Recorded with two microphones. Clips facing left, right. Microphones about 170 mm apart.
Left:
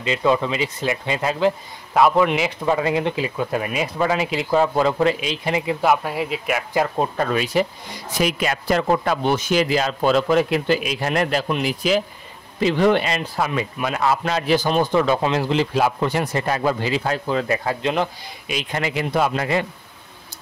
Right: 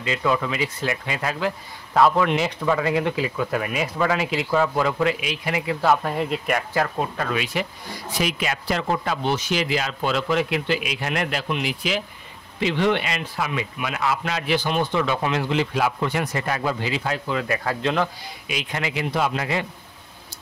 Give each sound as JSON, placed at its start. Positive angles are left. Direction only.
{"t": 0.0, "sound": "speech", "side_deg": 25}
{"t": 2.0, "sound": "speech", "side_deg": 10}
{"t": 2.6, "sound": "speech", "side_deg": 25}
{"t": 6.0, "sound": "speech", "side_deg": 5}
{"t": 7.0, "sound": "speech", "side_deg": 35}
{"t": 17.6, "sound": "speech", "side_deg": 20}
{"t": 18.5, "sound": "speech", "side_deg": 40}